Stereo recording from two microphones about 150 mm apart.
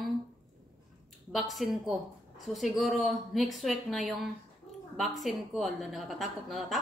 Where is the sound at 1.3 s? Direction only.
Centre (ahead or behind).